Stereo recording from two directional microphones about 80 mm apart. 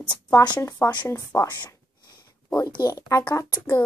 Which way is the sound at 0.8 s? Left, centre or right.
Left.